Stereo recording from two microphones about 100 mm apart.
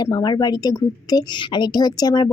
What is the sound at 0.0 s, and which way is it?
A woman's voice, 45° left (ahead or behind).